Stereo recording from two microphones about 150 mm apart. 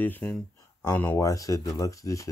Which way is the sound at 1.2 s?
25° left (ahead or behind).